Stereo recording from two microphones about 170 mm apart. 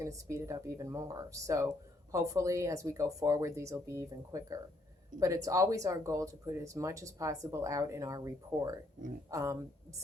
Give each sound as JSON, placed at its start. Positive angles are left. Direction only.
{"t": 0.0, "sound": "speech", "side_deg": -15}